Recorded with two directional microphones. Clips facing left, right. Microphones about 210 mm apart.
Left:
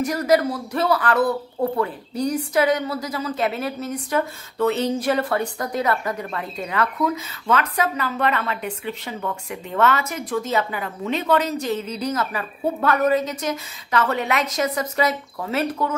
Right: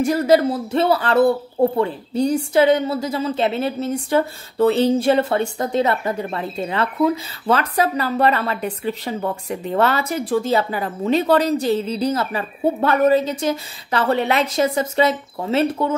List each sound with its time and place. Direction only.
0.0 s speech: 30° right (ahead or behind)